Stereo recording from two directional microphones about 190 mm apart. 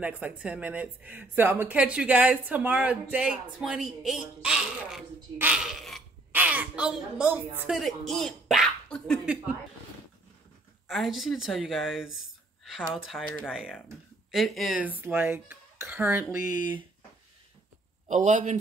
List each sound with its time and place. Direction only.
0.0 s speech: 5° right (ahead or behind)
10.9 s speech: centre (ahead or behind)
16.3 s speech: 45° left (ahead or behind)
18.0 s speech: 40° right (ahead or behind)